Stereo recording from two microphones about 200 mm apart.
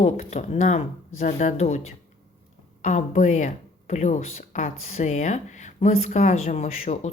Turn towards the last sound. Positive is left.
turn(degrees=35)  # may be behind; listen again after turning